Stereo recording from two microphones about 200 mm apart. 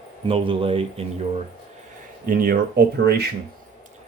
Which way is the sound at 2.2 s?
45° right (ahead or behind).